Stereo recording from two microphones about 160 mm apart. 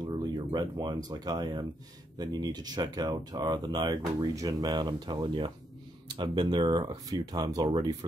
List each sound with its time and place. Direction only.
0.0 s speech: 25° right (ahead or behind)